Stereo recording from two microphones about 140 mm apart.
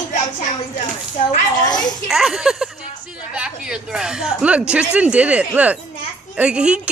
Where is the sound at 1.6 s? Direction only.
30° left (ahead or behind).